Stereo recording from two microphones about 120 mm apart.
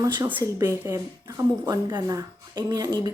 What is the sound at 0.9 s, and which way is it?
Speech, 25° right (ahead or behind).